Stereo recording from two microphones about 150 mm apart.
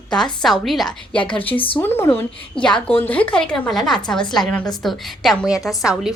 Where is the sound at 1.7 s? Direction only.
15° left (ahead or behind).